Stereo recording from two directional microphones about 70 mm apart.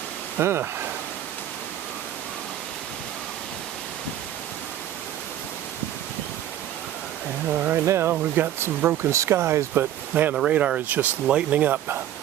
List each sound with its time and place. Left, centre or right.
0.3 s speech: right
7.4 s speech: right
7.9 s speech: right
9.0 s speech: right
10.3 s speech: centre